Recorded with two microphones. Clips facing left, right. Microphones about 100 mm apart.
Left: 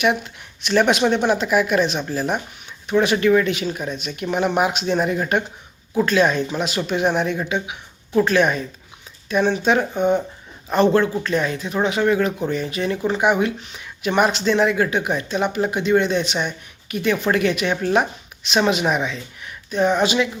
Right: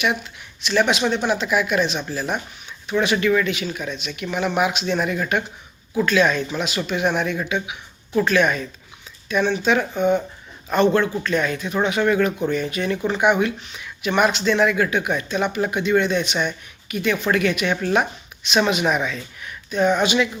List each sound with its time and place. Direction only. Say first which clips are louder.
0.0 s speech: left 3 dB; 40° left (ahead or behind)
7.0 s speech: left 1 dB; 30° left (ahead or behind)
10.7 s speech: left 1 dB; 35° left (ahead or behind)